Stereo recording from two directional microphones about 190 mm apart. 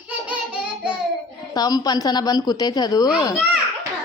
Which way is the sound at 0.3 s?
5° right (ahead or behind).